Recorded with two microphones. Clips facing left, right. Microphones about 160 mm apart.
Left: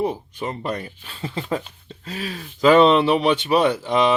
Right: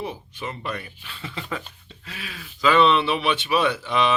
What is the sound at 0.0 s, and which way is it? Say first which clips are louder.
Speech: left 7 dB; 40° left (ahead or behind).